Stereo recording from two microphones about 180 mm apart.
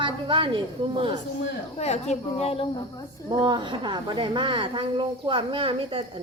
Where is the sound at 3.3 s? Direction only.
25° right (ahead or behind).